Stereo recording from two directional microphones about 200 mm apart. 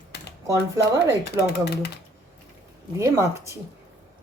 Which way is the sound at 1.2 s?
55° left (ahead or behind).